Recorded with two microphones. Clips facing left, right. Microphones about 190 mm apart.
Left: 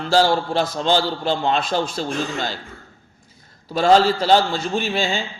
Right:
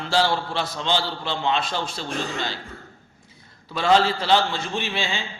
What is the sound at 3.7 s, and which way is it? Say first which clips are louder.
A man's voice: left 4 dB; 40° left (ahead or behind).